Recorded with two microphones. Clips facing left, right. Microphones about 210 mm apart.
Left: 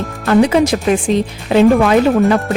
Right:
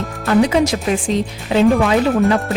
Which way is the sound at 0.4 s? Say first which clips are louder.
Left 3 dB; 55° left (ahead or behind).